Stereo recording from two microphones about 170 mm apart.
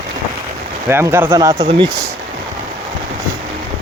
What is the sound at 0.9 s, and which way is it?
Speech, 15° right (ahead or behind).